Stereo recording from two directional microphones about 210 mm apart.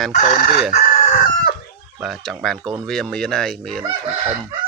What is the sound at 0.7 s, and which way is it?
Chicken, 35° left (ahead or behind).